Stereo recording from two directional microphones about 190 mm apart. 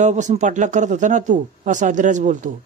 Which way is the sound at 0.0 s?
40° right (ahead or behind).